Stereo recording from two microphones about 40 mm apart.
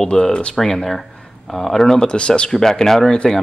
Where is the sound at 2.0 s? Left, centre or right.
Left.